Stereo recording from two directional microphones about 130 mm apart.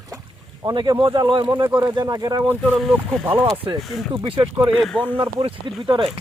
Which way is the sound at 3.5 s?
40° right (ahead or behind).